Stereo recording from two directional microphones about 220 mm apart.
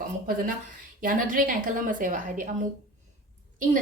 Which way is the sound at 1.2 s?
40° right (ahead or behind).